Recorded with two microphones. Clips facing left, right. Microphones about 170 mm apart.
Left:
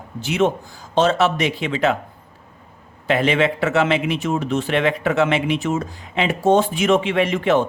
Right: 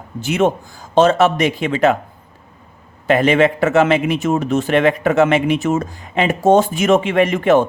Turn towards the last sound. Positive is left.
turn(degrees=-50)  # may be behind; listen again after turning